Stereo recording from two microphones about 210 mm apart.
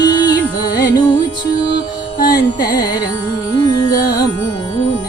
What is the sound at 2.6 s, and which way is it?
Carnatic music, 20° left (ahead or behind).